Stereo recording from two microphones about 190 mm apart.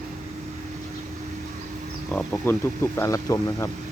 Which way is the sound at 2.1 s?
10° left (ahead or behind).